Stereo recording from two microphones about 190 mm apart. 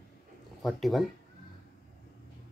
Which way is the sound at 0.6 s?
Centre (ahead or behind).